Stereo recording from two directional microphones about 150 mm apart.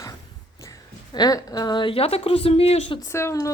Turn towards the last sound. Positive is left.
turn(degrees=20)  # may be behind; listen again after turning